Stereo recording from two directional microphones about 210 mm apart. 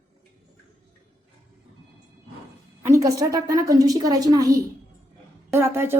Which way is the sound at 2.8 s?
15° right (ahead or behind).